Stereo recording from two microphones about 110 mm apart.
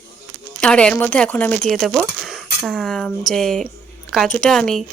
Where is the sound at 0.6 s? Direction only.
10° left (ahead or behind).